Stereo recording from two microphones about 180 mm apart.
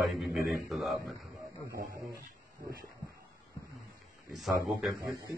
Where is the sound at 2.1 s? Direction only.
15° right (ahead or behind).